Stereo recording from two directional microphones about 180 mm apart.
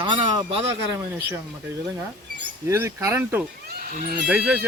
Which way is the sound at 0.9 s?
10° right (ahead or behind).